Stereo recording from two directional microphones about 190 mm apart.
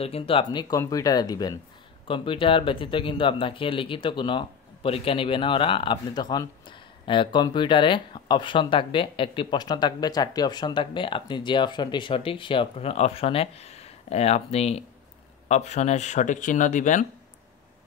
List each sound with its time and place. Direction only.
0.0 s speech: 30° left (ahead or behind)